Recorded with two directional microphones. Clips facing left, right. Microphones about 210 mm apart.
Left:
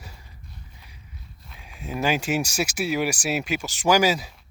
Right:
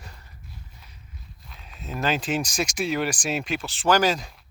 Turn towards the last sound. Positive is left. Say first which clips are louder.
# left 1 dB
turn(degrees=5)  # may be behind; listen again after turning